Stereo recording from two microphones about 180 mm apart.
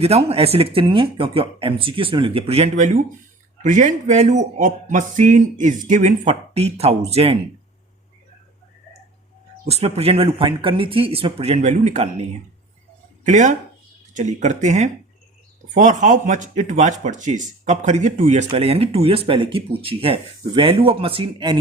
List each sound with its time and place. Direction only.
0.0 s speech: 35° right (ahead or behind)
9.6 s speech: 35° right (ahead or behind)
13.2 s speech: 40° right (ahead or behind); by 21.6 s 25° right (ahead or behind)